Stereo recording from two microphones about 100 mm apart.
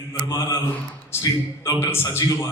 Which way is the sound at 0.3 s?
35° left (ahead or behind).